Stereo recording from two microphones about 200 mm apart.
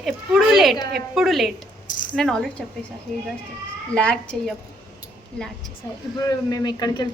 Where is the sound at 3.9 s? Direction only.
5° left (ahead or behind).